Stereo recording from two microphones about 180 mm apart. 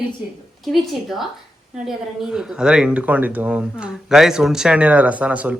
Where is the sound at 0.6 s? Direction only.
Centre (ahead or behind).